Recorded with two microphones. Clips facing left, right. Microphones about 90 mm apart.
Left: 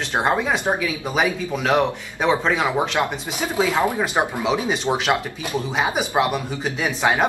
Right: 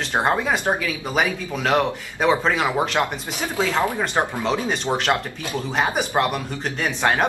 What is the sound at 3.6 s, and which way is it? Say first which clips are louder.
Speech: left 2 dB; 15° left (ahead or behind).